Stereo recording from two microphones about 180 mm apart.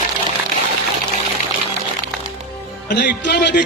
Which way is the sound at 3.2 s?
75° left (ahead or behind).